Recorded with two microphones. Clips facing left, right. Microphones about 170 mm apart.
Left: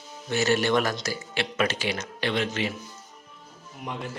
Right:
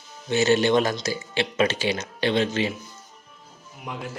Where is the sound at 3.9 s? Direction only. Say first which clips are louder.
Even; 5° right (ahead or behind).